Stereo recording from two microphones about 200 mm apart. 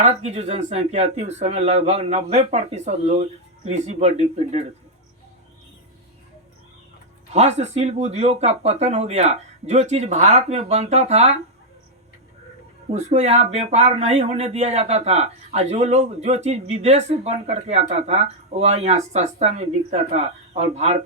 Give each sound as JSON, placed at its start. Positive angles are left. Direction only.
{"t": 0.0, "sound": "speech", "side_deg": -35}
{"t": 7.3, "sound": "speech", "side_deg": -35}
{"t": 12.9, "sound": "speech", "side_deg": -35}